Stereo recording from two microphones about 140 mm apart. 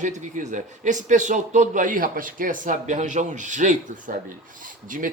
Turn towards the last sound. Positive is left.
turn(degrees=-70)  # may be behind; listen again after turning